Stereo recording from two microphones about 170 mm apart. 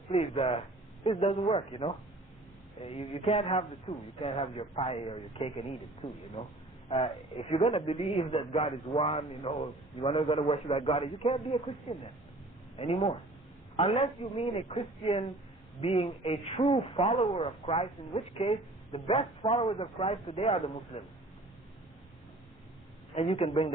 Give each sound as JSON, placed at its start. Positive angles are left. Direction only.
{"t": 0.1, "sound": "speech", "side_deg": 35}
{"t": 23.1, "sound": "speech", "side_deg": 35}